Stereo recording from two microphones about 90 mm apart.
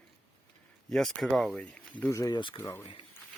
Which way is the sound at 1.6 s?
20° left (ahead or behind).